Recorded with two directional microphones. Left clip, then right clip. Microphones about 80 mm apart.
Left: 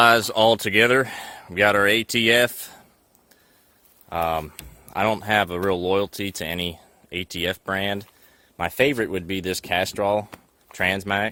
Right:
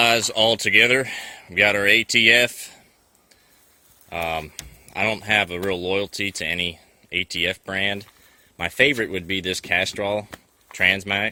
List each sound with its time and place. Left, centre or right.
0.0 s speech: left
0.3 s speech: left
0.7 s speech: left
4.1 s speech: left
4.9 s speech: left
8.5 s a man's voice: centre